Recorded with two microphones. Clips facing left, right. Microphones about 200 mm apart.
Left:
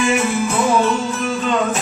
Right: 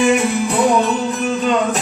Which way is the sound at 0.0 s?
15° right (ahead or behind).